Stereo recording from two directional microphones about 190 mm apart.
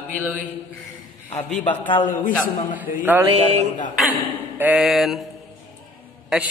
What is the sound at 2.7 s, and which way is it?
Mantra, 10° right (ahead or behind).